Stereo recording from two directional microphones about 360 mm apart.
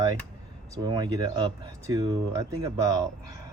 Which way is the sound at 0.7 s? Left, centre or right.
Centre.